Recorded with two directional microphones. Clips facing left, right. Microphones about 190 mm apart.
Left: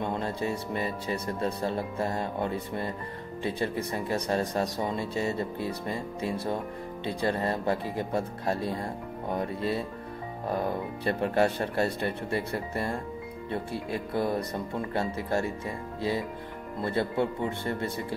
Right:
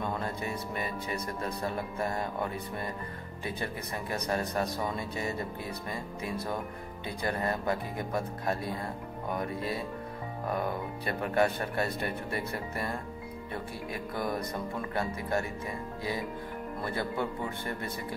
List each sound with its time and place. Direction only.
0.0 s speech: 25° left (ahead or behind)